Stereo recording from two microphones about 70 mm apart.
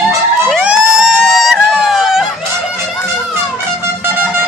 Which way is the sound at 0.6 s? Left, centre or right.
Centre.